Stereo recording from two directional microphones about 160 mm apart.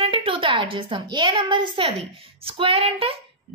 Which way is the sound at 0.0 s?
35° right (ahead or behind).